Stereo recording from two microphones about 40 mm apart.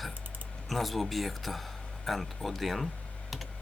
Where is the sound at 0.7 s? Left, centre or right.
Centre.